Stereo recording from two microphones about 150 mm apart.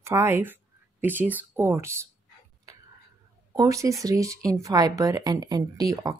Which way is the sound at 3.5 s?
20° right (ahead or behind).